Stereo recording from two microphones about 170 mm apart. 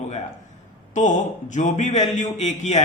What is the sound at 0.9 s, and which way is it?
A man's voice, 45° left (ahead or behind).